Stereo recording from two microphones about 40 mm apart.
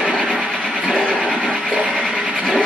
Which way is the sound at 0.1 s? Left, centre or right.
Right.